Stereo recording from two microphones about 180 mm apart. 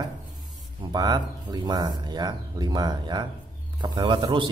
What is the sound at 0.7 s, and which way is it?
Speech, 25° right (ahead or behind).